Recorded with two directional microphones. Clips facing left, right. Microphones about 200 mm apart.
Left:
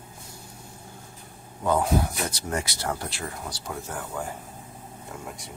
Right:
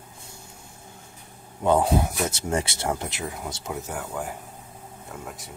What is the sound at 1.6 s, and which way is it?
Speech, 30° right (ahead or behind).